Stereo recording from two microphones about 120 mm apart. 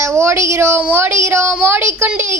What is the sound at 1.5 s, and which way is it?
Speech, 15° right (ahead or behind).